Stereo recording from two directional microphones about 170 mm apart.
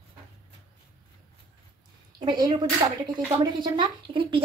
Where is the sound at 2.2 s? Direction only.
25° right (ahead or behind).